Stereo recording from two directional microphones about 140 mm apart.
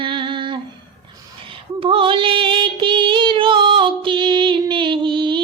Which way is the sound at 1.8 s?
40° right (ahead or behind).